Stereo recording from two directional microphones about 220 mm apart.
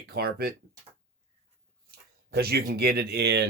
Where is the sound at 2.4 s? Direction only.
45° right (ahead or behind).